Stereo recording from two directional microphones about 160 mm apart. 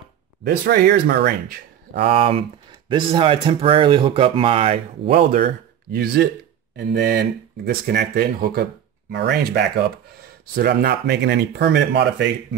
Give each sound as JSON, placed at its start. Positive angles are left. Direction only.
{"t": 0.4, "sound": "speech", "side_deg": -80}
{"t": 2.0, "sound": "speech", "side_deg": -40}
{"t": 5.4, "sound": "speech", "side_deg": -80}
{"t": 9.1, "sound": "speech", "side_deg": -85}